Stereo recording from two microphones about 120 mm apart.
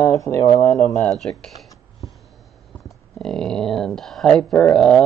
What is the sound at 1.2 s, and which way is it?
Speech, 5° left (ahead or behind).